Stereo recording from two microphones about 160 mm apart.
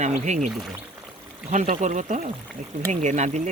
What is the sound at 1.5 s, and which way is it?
Speech, 50° right (ahead or behind).